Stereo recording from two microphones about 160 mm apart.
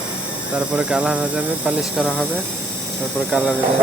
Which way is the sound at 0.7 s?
5° right (ahead or behind).